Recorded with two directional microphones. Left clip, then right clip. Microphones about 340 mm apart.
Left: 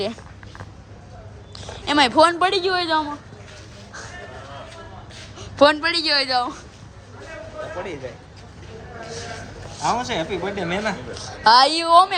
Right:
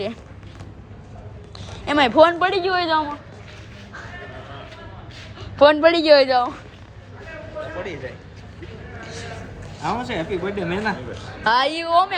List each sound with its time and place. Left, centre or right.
1.5 s speech: centre
5.4 s a woman's voice: centre
9.8 s speech: centre